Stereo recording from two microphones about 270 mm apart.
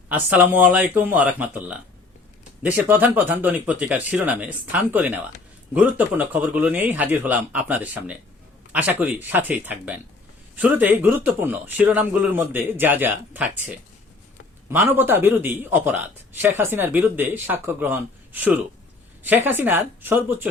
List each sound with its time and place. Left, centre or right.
0.1 s a man's voice: centre
14.7 s a man's voice: centre